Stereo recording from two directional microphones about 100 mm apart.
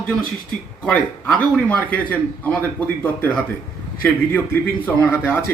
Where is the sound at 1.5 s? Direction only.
15° left (ahead or behind).